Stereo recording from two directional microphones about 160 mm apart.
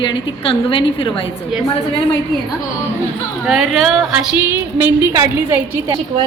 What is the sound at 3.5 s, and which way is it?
Speech, centre (ahead or behind).